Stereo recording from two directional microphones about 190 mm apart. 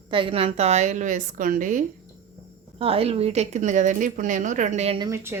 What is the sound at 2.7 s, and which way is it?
A woman's voice, 30° right (ahead or behind).